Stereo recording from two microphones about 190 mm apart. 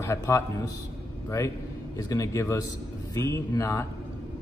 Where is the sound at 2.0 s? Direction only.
20° left (ahead or behind).